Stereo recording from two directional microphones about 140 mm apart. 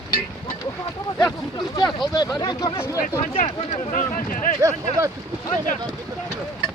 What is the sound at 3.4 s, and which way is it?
Speech, 50° left (ahead or behind).